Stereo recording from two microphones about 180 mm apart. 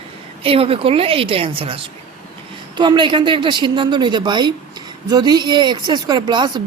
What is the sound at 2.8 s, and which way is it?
Speech, 25° right (ahead or behind).